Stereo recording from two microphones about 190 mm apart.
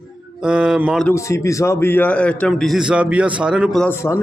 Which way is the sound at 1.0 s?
15° left (ahead or behind).